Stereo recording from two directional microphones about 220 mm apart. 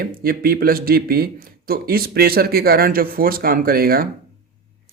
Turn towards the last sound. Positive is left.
turn(degrees=-40)  # may be behind; listen again after turning